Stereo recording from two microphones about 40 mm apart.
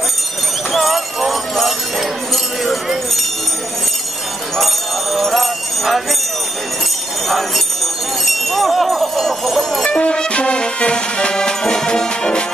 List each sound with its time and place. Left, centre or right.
0.7 s jingle bell: centre
4.6 s jingle bell: centre
7.2 s jingle bell: centre
8.3 s a sound: centre
9.8 s music: left